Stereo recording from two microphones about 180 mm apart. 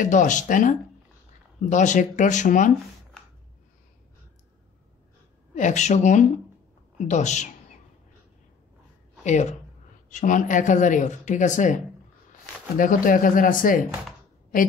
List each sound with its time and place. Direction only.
0.0 s speech: 45° left (ahead or behind)
5.5 s speech: 40° left (ahead or behind)
9.2 s speech: 40° left (ahead or behind)